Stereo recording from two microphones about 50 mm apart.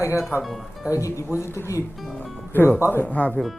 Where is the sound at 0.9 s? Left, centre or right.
Left.